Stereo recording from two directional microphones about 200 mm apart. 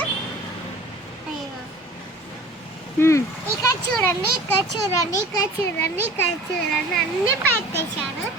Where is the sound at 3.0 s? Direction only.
15° left (ahead or behind).